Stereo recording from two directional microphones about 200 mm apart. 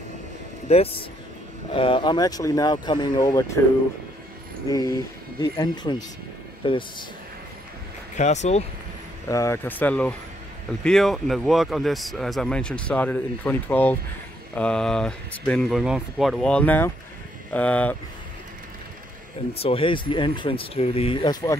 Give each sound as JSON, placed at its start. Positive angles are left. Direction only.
{"t": 0.7, "sound": "speech", "side_deg": 30}
{"t": 4.6, "sound": "speech", "side_deg": 20}
{"t": 8.2, "sound": "speech", "side_deg": 35}
{"t": 9.3, "sound": "a man's voice", "side_deg": 15}
{"t": 19.5, "sound": "speech", "side_deg": 30}